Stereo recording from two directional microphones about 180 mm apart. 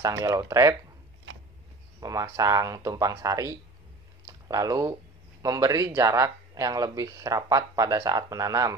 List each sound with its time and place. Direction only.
0.0 s speech: 20° right (ahead or behind)
2.0 s speech: 20° right (ahead or behind)